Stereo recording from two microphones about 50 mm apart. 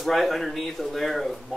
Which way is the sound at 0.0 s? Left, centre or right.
Centre.